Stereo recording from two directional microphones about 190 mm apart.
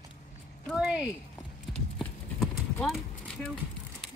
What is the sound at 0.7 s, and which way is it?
Speech, 5° right (ahead or behind).